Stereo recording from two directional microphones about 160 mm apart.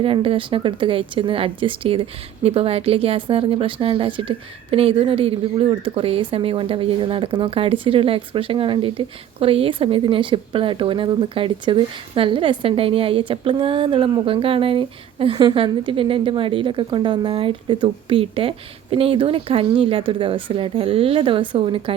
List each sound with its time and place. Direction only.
0.0 s speech: 35° right (ahead or behind)